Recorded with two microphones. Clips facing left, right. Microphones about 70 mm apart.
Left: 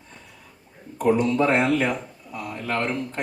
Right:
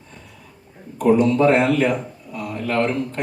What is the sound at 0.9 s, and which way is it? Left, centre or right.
Speech, left.